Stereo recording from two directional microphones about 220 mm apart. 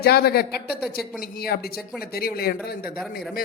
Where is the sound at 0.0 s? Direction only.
45° left (ahead or behind).